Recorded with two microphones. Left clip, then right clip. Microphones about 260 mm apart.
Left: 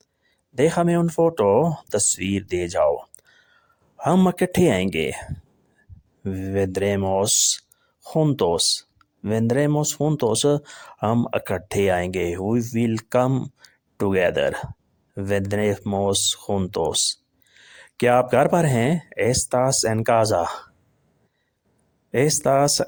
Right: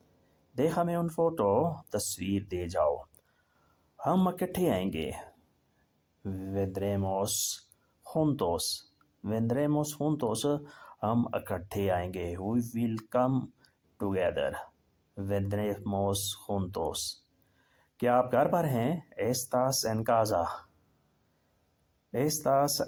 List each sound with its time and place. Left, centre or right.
0.5 s speech: left
22.1 s speech: left